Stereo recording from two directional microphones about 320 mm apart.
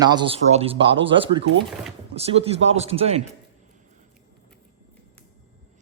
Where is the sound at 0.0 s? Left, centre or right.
Centre.